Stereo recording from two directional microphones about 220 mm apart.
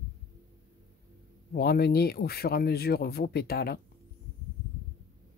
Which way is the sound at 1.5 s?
45° left (ahead or behind).